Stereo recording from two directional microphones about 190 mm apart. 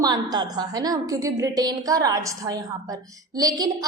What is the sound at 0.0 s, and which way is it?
A woman's voice, 20° right (ahead or behind).